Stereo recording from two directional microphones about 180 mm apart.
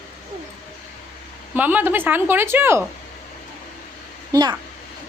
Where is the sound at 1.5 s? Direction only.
10° right (ahead or behind).